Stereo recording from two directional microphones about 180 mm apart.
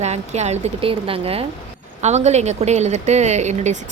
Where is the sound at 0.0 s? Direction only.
40° right (ahead or behind).